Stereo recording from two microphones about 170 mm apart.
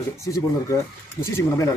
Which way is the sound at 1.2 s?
15° left (ahead or behind).